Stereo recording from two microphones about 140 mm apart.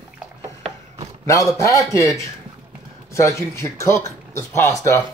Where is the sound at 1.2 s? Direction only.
20° left (ahead or behind).